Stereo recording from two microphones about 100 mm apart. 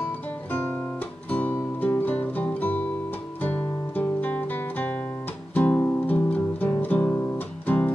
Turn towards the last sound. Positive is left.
turn(degrees=20)  # may be behind; listen again after turning